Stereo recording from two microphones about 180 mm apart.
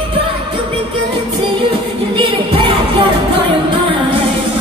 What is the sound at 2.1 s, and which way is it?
Music, 30° right (ahead or behind).